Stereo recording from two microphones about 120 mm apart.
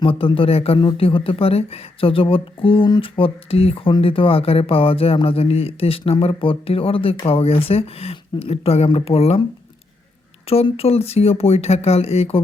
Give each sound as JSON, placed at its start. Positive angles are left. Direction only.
{"t": 0.0, "sound": "speech", "side_deg": 45}
{"t": 10.4, "sound": "speech", "side_deg": 55}